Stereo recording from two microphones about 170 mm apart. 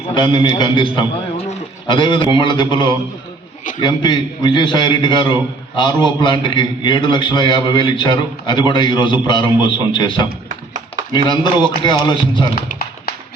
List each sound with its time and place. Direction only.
0.1 s a man's voice: 25° left (ahead or behind)
11.3 s a man's voice: 25° left (ahead or behind)